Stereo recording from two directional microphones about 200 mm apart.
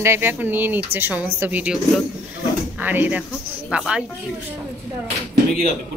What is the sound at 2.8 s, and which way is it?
A woman's voice, 10° right (ahead or behind).